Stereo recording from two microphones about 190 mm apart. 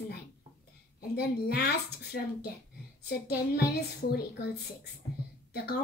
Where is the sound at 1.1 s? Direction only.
60° left (ahead or behind).